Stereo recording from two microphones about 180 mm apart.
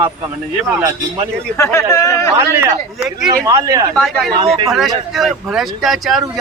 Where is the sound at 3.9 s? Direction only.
5° left (ahead or behind).